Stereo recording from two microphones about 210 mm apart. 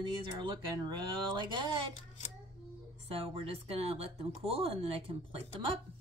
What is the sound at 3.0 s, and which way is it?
Speech, 25° right (ahead or behind).